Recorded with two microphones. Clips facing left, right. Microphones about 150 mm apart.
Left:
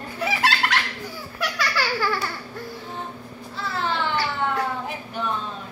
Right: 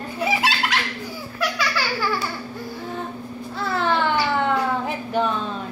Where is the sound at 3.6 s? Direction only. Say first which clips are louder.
Right 5 dB; 55° right (ahead or behind).